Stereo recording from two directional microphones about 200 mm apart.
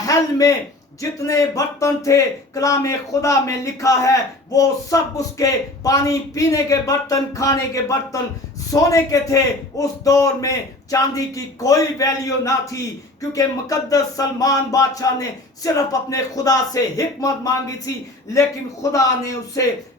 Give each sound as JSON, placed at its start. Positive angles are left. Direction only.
{"t": 0.0, "sound": "a man's voice", "side_deg": 15}